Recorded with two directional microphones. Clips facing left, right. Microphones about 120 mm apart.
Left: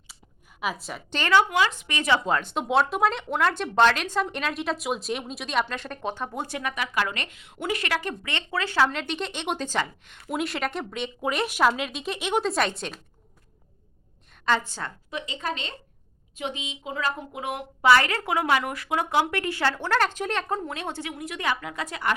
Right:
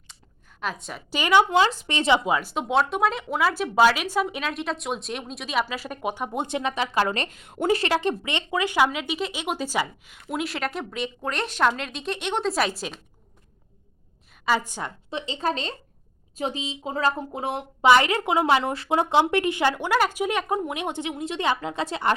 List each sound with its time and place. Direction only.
0.6 s speech: 5° left (ahead or behind)
1.1 s speech: 15° right (ahead or behind)
1.5 s speech: 30° right (ahead or behind)
2.2 s speech: 5° right (ahead or behind)
14.4 s speech: 10° right (ahead or behind)
15.1 s a woman's voice: 30° right (ahead or behind)
17.8 s speech: 20° right (ahead or behind)